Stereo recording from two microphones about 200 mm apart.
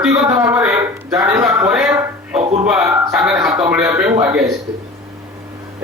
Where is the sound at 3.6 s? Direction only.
15° right (ahead or behind).